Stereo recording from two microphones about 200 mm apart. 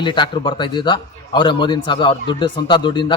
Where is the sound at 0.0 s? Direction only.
25° left (ahead or behind).